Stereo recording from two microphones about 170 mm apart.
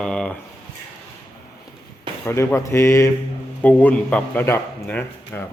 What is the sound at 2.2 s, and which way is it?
A man's voice, 15° left (ahead or behind).